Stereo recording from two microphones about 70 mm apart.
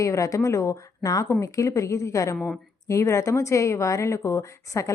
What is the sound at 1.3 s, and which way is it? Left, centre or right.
A woman's voice, left.